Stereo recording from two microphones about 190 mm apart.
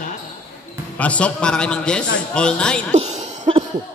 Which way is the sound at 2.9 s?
35° right (ahead or behind).